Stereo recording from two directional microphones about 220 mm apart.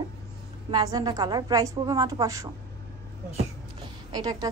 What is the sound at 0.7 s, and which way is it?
A woman's voice, 15° right (ahead or behind).